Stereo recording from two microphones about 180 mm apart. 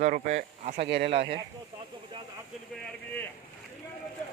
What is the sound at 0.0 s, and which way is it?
Speech, 40° right (ahead or behind).